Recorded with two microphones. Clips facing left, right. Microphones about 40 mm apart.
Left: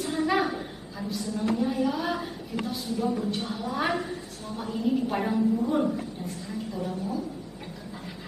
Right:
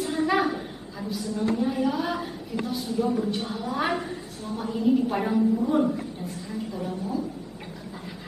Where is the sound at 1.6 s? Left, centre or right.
Centre.